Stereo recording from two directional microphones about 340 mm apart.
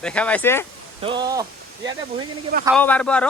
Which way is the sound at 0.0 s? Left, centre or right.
Centre.